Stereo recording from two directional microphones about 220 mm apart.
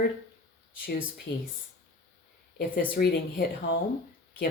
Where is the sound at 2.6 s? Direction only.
45° left (ahead or behind).